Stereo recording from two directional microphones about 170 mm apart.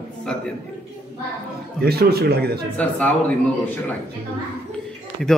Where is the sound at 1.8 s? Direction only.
70° right (ahead or behind).